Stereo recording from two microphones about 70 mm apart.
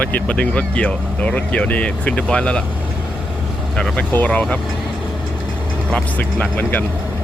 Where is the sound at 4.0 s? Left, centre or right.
Left.